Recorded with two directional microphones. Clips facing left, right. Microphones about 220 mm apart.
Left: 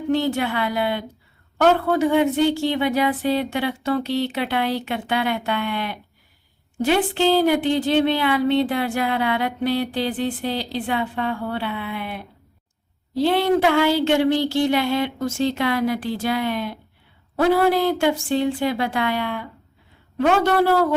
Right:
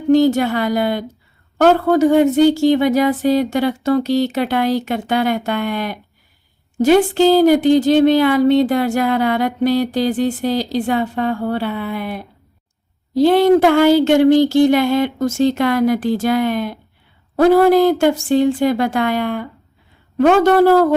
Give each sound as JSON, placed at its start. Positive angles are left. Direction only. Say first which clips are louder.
{"t": 0.1, "sound": "a woman's voice", "louder": "right 9 dB", "side_deg": -40}